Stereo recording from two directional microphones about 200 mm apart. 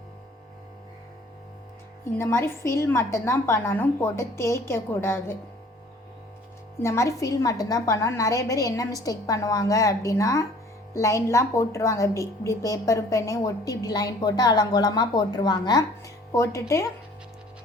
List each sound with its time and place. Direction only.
2.1 s a woman's voice: 15° left (ahead or behind)
6.8 s a woman's voice: 15° left (ahead or behind)